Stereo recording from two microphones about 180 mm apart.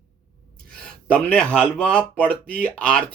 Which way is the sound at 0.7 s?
5° left (ahead or behind).